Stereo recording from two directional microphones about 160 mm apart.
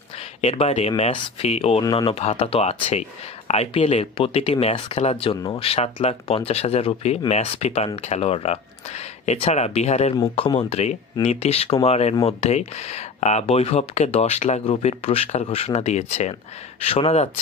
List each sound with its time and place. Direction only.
0.4 s a man's voice: 40° left (ahead or behind)
1.8 s a man's voice: 30° left (ahead or behind)
10.3 s a man's voice: 30° left (ahead or behind)